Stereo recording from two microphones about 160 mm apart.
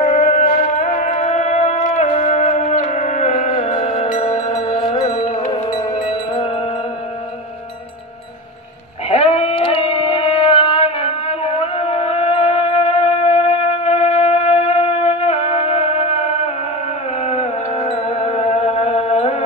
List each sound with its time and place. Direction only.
0.0 s music: 55° left (ahead or behind)
5.7 s music: 25° left (ahead or behind)
9.1 s a sound: 40° left (ahead or behind)
17.2 s music: 40° left (ahead or behind)